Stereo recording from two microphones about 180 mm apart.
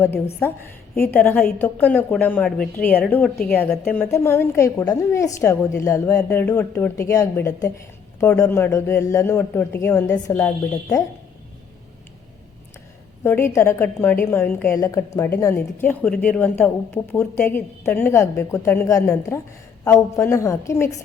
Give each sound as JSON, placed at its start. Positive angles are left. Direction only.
{"t": 0.4, "sound": "a woman's voice", "side_deg": 10}
{"t": 13.2, "sound": "a woman's voice", "side_deg": 15}